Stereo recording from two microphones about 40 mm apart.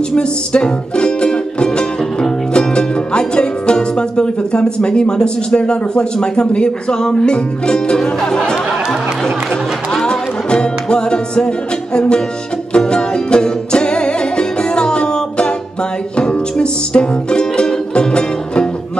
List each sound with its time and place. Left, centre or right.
0.1 s music: left
6.1 s speech: left
10.0 s music: left